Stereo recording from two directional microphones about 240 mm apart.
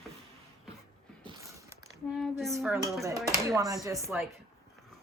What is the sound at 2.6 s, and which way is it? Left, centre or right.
Speech, centre.